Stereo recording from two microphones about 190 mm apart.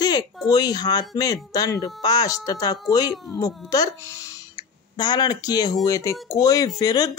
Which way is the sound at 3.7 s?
15° left (ahead or behind).